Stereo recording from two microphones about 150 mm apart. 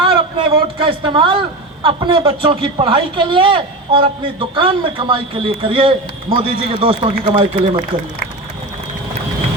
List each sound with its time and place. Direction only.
0.0 s a man's voice: 35° right (ahead or behind)